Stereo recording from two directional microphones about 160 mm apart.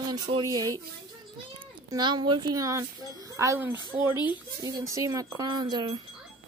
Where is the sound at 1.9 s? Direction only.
25° right (ahead or behind).